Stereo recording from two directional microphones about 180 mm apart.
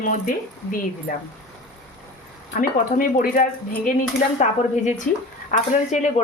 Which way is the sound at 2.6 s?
50° left (ahead or behind).